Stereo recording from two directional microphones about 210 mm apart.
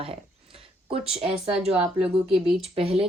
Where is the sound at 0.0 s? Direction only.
25° right (ahead or behind).